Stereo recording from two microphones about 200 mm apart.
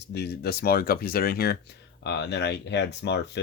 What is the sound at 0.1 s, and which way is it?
Speech, 55° left (ahead or behind).